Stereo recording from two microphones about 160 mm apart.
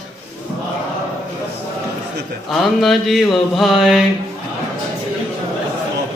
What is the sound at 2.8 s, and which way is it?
Mantra, centre (ahead or behind).